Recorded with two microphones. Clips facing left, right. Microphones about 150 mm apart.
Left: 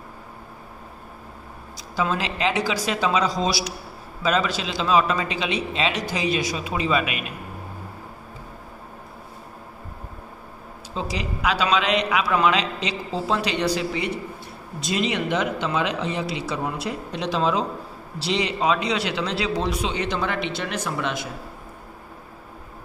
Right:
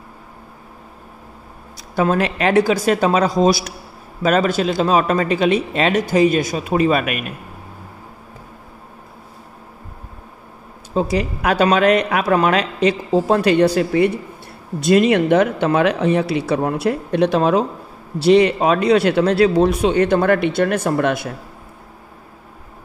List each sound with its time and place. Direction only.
1.8 s speech: 55° right (ahead or behind)
11.0 s speech: 50° right (ahead or behind)